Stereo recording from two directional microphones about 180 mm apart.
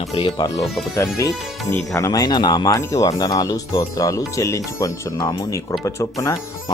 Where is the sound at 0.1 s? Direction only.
25° left (ahead or behind).